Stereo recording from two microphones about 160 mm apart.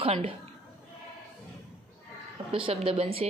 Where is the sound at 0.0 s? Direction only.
35° right (ahead or behind).